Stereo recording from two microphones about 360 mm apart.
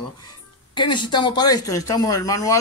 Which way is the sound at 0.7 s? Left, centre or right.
Centre.